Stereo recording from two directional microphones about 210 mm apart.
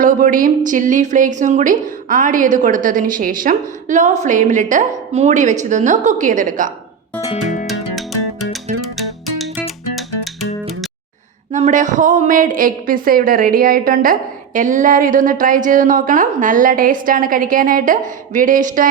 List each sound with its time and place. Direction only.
0.0 s a woman's voice: 40° right (ahead or behind)
7.4 s music: 35° left (ahead or behind)
11.5 s a woman's voice: 35° right (ahead or behind)